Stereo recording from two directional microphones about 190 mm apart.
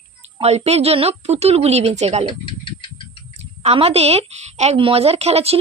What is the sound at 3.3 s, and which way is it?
Speech, 35° right (ahead or behind).